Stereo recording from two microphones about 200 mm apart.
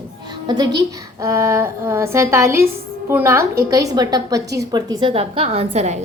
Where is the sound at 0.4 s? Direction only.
20° right (ahead or behind).